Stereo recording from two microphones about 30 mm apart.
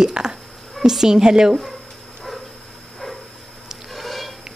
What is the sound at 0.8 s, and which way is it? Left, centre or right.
Speech, centre.